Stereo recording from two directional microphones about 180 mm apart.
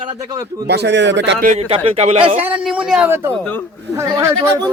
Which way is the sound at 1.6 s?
35° right (ahead or behind).